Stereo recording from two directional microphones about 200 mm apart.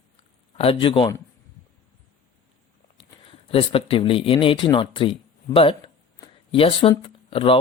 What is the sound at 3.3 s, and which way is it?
Speech, 25° left (ahead or behind).